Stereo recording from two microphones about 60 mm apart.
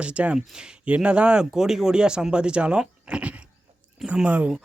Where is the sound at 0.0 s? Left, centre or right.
Right.